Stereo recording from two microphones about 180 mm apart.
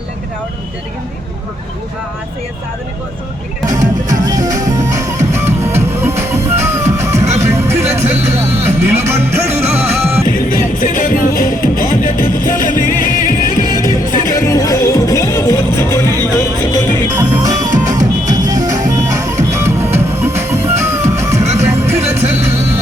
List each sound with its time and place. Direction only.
3.7 s music: 20° right (ahead or behind)
8.3 s speech: 15° right (ahead or behind)
9.0 s music: 15° right (ahead or behind)
10.2 s music: 55° left (ahead or behind)
13.7 s music: 20° right (ahead or behind)
14.3 s music: 15° left (ahead or behind)
17.2 s music: 20° right (ahead or behind)
22.2 s music: 35° right (ahead or behind)